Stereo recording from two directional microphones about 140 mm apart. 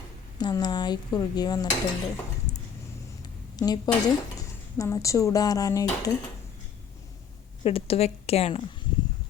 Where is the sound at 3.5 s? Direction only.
30° left (ahead or behind).